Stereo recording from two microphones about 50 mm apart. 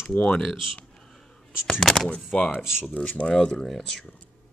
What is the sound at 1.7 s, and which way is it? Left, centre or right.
Speech, centre.